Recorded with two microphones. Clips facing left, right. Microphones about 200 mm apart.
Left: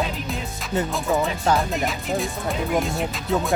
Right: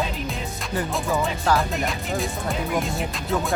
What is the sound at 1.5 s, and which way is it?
Music, centre (ahead or behind).